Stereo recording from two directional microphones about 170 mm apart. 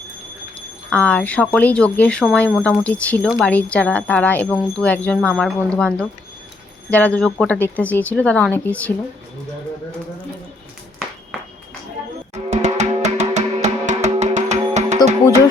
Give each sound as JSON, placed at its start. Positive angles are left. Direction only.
{"t": 0.9, "sound": "speech", "side_deg": 10}
{"t": 12.3, "sound": "music", "side_deg": -45}